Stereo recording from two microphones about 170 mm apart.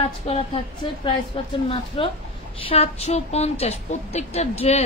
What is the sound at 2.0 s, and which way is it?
A woman's voice, 35° left (ahead or behind).